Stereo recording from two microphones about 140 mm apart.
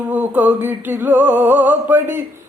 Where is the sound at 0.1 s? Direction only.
10° right (ahead or behind).